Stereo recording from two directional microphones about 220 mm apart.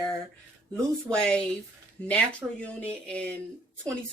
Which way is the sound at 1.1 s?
5° left (ahead or behind).